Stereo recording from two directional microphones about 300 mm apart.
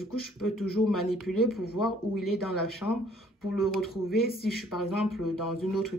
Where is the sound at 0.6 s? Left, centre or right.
Left.